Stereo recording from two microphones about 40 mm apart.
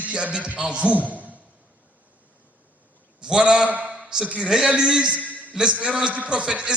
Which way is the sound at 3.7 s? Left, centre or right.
Right.